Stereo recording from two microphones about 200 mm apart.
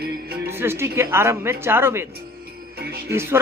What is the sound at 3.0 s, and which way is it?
Speech, 15° right (ahead or behind).